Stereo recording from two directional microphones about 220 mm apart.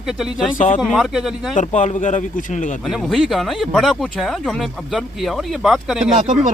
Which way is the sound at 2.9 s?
Centre (ahead or behind).